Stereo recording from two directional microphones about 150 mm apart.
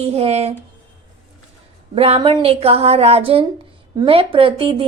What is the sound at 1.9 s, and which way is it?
A woman's voice, 40° right (ahead or behind).